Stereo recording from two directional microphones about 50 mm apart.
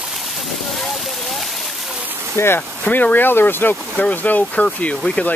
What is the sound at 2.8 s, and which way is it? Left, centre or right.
Speech, left.